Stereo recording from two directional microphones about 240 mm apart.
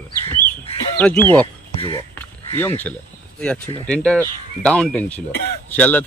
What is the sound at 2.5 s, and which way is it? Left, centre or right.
A man's voice, centre.